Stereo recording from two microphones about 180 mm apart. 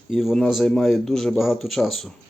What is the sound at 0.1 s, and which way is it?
Speech, centre (ahead or behind).